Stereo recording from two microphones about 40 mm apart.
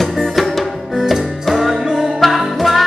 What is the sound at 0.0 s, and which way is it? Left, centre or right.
Music, centre.